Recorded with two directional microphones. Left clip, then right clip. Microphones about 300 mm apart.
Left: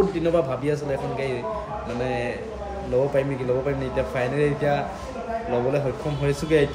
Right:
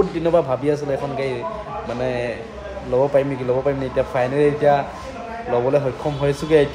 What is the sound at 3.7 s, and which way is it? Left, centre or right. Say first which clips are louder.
A man's voice: right 5 dB; centre.